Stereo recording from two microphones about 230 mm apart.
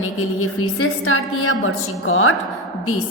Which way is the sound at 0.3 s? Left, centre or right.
Left.